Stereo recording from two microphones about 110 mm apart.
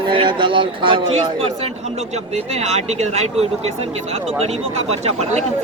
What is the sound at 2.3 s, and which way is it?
Speech, 80° right.